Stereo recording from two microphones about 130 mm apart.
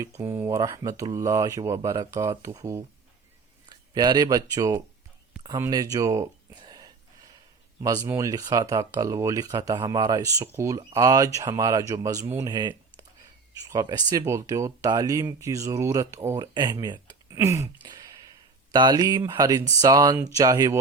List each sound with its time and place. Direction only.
0.0 s speech: 25° right (ahead or behind)
8.0 s speech: 25° right (ahead or behind)
17.3 s speech: 20° right (ahead or behind)
18.7 s speech: 35° right (ahead or behind)